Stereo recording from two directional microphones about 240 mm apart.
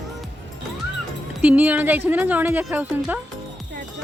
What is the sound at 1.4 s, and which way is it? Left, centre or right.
A woman's voice, centre.